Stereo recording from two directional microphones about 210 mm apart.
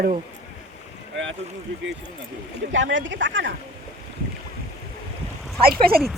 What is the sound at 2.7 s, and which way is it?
Speech, 60° right (ahead or behind).